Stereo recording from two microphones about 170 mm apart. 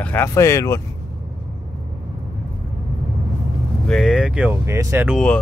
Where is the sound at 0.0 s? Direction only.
10° left (ahead or behind).